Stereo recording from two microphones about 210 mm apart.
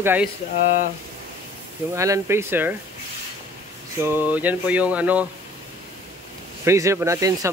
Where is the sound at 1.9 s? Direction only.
15° right (ahead or behind).